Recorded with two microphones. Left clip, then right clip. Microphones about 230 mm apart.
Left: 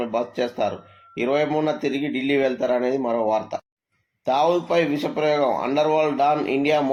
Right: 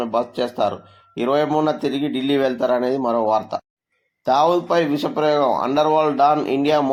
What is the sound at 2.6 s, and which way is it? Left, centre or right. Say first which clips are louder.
Speech: right 3 dB; right.